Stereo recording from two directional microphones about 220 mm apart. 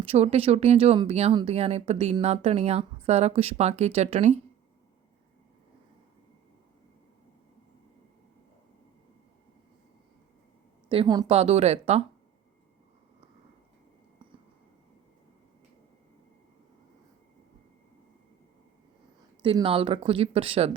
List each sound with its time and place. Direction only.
0.0 s speech: 25° right (ahead or behind)
10.8 s speech: 20° right (ahead or behind)
19.4 s speech: 25° right (ahead or behind)